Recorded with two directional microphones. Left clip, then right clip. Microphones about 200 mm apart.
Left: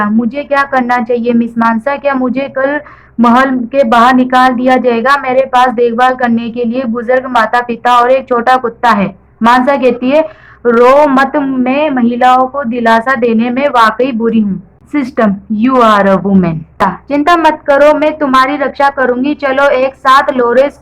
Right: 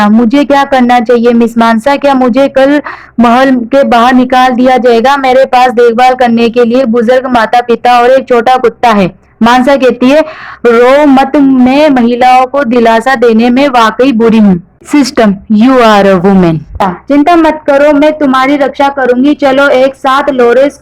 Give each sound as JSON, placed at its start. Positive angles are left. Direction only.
{"t": 0.0, "sound": "speech", "side_deg": -45}
{"t": 3.2, "sound": "speech", "side_deg": -45}
{"t": 10.8, "sound": "a woman's voice", "side_deg": -35}
{"t": 14.9, "sound": "a woman's voice", "side_deg": -40}